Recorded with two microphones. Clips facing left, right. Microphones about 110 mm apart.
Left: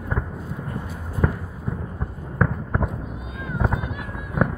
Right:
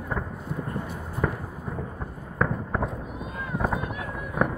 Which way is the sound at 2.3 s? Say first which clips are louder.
Left 2 dB; 5° left (ahead or behind).